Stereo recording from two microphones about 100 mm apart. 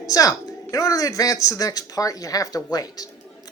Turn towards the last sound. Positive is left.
turn(degrees=40)  # may be behind; listen again after turning